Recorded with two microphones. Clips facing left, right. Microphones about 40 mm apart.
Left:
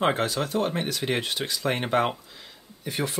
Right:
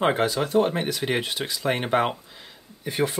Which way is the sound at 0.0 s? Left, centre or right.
Centre.